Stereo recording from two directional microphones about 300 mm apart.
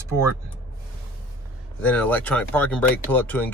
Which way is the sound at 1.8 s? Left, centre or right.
Centre.